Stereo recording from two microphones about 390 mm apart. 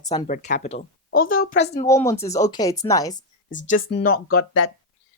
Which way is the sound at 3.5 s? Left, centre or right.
Left.